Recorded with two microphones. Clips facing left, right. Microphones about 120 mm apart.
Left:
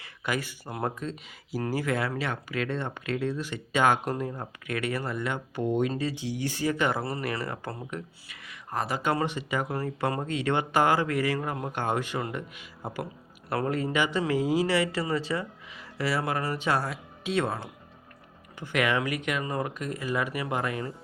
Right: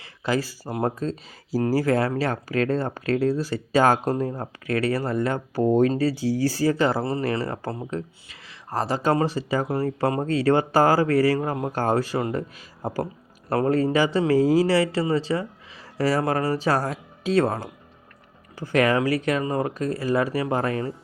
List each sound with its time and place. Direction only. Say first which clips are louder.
0.0 s speech: right 6 dB; 30° right (ahead or behind)
16.0 s speech: right 6 dB; 40° right (ahead or behind)